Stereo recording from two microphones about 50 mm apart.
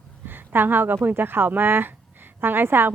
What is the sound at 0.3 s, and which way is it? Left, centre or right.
Speech, right.